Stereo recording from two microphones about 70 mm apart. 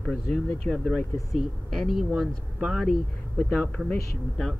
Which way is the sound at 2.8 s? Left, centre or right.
Centre.